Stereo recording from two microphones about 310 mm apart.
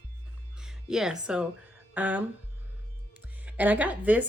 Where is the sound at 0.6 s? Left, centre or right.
Centre.